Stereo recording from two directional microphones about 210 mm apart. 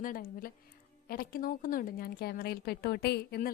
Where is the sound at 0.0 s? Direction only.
40° left (ahead or behind).